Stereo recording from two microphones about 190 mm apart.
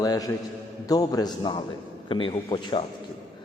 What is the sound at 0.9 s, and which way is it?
A man's voice, 20° left (ahead or behind).